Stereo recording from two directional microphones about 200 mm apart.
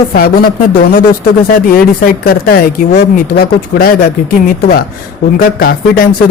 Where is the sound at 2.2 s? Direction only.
50° left (ahead or behind).